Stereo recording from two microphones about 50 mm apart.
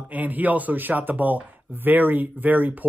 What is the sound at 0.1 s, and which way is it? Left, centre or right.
Speech, right.